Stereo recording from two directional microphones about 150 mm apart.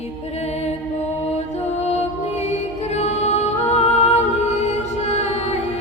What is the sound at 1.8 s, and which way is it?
Music, 45° left (ahead or behind).